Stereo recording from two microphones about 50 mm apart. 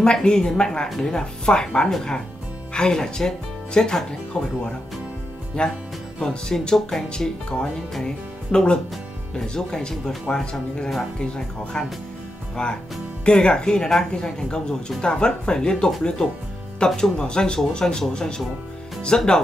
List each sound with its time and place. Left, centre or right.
0.0 s speech: centre